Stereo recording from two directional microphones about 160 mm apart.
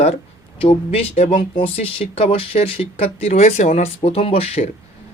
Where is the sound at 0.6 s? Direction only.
40° left (ahead or behind).